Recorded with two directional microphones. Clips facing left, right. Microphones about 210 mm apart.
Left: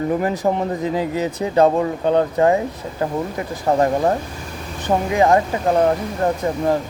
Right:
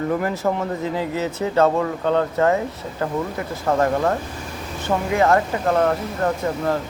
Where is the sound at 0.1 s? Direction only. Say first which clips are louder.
Left 2 dB; 20° left (ahead or behind).